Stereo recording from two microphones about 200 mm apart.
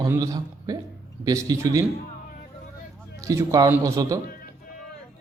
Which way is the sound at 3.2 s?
15° right (ahead or behind).